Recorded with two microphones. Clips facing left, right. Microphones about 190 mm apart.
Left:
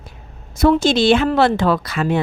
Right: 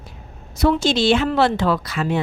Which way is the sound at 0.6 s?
50° left (ahead or behind).